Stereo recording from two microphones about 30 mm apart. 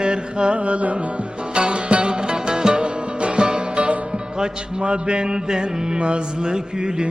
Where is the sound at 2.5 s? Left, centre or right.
Right.